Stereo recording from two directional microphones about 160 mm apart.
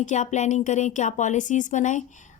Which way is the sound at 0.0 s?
50° left (ahead or behind).